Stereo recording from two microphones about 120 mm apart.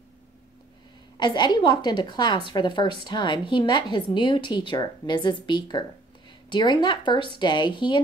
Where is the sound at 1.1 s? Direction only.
40° left (ahead or behind).